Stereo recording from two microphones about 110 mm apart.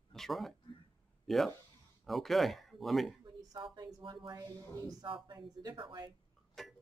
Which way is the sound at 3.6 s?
45° right (ahead or behind).